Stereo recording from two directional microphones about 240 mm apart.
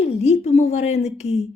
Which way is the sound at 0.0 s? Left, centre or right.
Left.